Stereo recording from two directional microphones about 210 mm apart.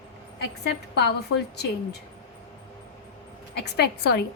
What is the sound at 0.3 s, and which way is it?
Speech, 50° left (ahead or behind).